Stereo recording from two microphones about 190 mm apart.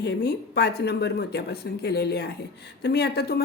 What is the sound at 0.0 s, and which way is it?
Speech, 60° left (ahead or behind).